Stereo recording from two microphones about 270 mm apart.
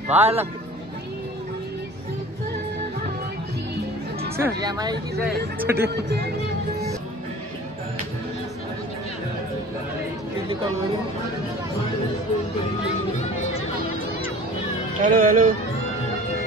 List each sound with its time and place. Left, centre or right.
0.1 s speech: right
4.4 s speech: centre
15.0 s speech: right